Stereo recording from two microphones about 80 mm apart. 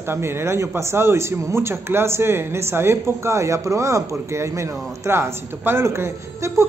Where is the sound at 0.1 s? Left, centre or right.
Right.